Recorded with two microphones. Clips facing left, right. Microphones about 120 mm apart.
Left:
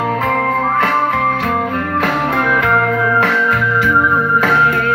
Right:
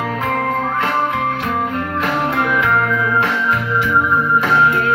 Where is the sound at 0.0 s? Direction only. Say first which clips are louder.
Left 4 dB; 45° left (ahead or behind); by 2.3 s 60° left (ahead or behind).